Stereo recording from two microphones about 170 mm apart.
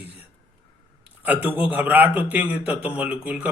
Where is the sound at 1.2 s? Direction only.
10° right (ahead or behind).